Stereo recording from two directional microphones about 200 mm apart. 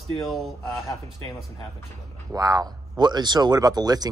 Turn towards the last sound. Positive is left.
turn(degrees=-20)  # may be behind; listen again after turning